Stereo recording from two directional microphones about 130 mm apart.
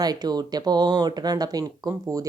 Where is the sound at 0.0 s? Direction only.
30° right (ahead or behind).